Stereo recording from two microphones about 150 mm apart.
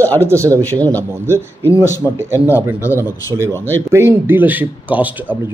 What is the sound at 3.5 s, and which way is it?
Speech, 15° left (ahead or behind).